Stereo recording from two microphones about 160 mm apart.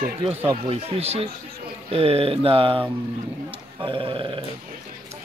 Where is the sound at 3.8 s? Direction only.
30° right (ahead or behind).